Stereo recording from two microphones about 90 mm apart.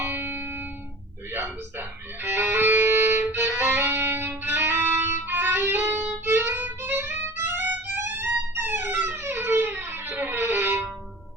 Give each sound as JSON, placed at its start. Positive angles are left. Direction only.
{"t": 0.0, "sound": "music", "side_deg": -25}
{"t": 2.2, "sound": "music", "side_deg": -25}